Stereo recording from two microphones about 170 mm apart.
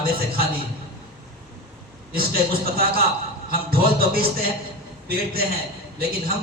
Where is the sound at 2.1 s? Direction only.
60° right (ahead or behind).